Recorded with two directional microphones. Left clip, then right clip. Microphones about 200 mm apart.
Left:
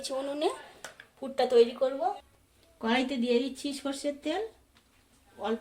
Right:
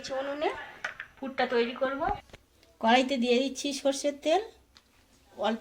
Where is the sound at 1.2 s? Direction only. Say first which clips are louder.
Left 5 dB; 50° left (ahead or behind).